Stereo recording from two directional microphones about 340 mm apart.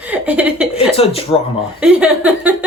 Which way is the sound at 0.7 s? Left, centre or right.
Centre.